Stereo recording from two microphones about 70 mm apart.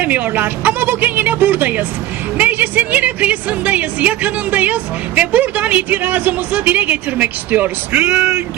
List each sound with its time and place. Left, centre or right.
0.0 s a woman's voice: right